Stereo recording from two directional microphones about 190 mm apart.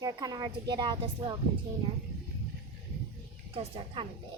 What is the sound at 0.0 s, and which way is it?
A woman's voice, 20° right (ahead or behind).